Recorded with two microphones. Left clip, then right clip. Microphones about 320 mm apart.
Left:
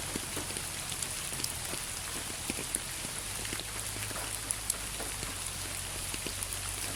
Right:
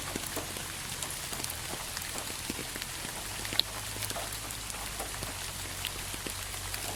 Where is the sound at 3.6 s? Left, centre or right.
Right.